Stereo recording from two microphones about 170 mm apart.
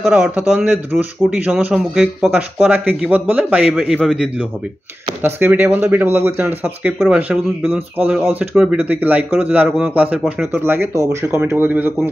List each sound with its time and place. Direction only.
0.1 s speech: 10° right (ahead or behind)